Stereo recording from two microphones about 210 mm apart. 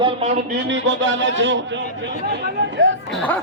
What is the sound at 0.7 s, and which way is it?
Speech, 60° right (ahead or behind).